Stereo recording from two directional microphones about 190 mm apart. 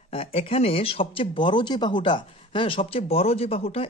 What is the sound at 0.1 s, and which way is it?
Speech, 30° left (ahead or behind).